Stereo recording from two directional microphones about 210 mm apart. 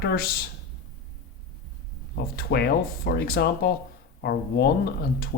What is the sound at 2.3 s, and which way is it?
A man's voice, 50° left (ahead or behind).